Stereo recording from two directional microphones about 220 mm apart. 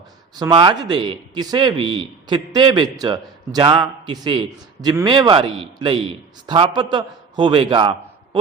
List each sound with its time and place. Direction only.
0.3 s a man's voice: 20° right (ahead or behind)